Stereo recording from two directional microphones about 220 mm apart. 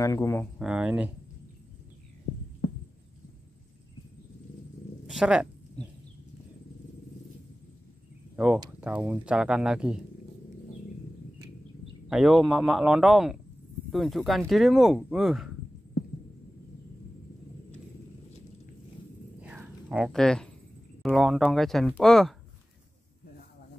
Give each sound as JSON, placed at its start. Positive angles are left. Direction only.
{"t": 0.0, "sound": "speech", "side_deg": 15}
{"t": 0.6, "sound": "speech", "side_deg": -5}
{"t": 2.6, "sound": "heart sounds", "side_deg": 40}
{"t": 5.0, "sound": "speech", "side_deg": -5}
{"t": 8.8, "sound": "speech", "side_deg": -5}
{"t": 12.1, "sound": "speech", "side_deg": 0}
{"t": 19.4, "sound": "a sound", "side_deg": -5}
{"t": 21.0, "sound": "speech", "side_deg": 0}